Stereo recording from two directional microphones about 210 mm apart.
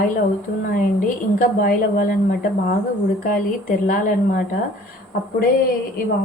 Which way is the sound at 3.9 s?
45° left (ahead or behind).